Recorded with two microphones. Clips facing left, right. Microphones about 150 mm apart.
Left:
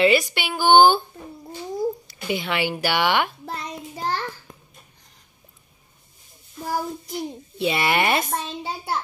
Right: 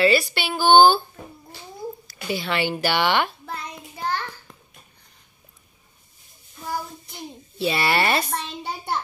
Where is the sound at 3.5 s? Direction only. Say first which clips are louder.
Left 2 dB; 35° left (ahead or behind).